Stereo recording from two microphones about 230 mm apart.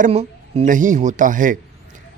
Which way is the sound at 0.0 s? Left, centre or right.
Right.